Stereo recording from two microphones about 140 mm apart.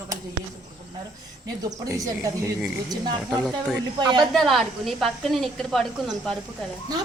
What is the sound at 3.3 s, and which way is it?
Speech, centre (ahead or behind).